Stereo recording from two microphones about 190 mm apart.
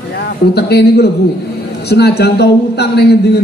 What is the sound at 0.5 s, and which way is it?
A man's voice, 60° left (ahead or behind).